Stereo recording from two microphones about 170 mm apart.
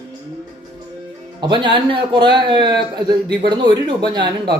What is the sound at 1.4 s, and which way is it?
A man's voice, 25° right (ahead or behind).